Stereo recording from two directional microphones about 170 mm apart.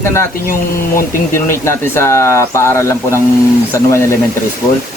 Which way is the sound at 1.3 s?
15° left (ahead or behind).